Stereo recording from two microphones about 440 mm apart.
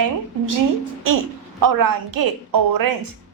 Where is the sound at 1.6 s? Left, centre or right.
Right.